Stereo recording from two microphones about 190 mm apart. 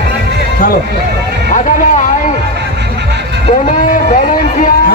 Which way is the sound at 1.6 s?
40° left (ahead or behind).